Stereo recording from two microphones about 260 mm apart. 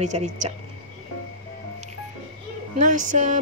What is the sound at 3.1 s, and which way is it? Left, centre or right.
Speech, right.